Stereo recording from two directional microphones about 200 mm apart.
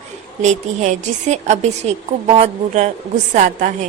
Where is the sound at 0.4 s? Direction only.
35° right (ahead or behind).